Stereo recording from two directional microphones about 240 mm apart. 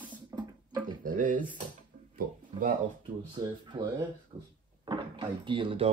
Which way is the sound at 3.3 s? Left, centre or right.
Centre.